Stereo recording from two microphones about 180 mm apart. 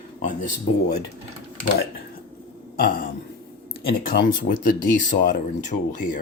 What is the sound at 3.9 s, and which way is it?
Speech, 50° left (ahead or behind).